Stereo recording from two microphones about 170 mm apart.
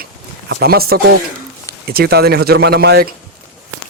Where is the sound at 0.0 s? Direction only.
65° right (ahead or behind).